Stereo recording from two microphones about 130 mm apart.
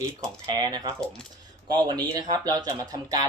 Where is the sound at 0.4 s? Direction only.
30° right (ahead or behind).